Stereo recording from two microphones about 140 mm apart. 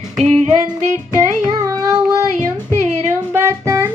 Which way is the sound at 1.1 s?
25° right (ahead or behind).